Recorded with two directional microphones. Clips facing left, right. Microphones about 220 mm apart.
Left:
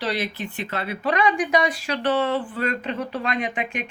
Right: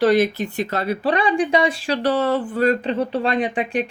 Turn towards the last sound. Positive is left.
turn(degrees=-35)  # may be behind; listen again after turning